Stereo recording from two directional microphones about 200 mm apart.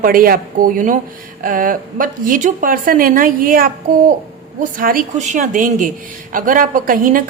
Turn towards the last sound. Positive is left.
turn(degrees=-45)  # may be behind; listen again after turning